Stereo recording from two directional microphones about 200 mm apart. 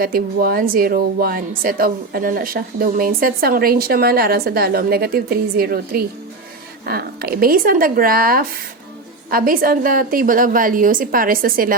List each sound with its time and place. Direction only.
0.0 s speech: 45° right (ahead or behind)